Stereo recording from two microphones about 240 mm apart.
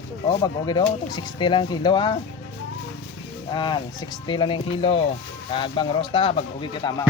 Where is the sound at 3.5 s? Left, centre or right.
Centre.